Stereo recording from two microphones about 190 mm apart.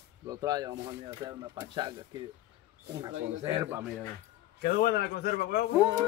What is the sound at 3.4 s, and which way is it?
Speech, 15° right (ahead or behind).